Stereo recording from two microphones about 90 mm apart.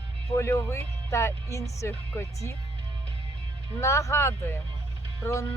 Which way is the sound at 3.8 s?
35° left (ahead or behind).